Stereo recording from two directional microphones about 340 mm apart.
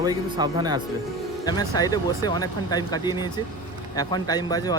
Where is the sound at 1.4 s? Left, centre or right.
Centre.